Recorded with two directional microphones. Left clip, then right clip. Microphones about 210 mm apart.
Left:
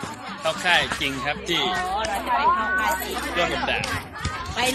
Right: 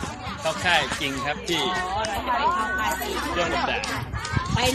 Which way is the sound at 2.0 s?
25° left (ahead or behind).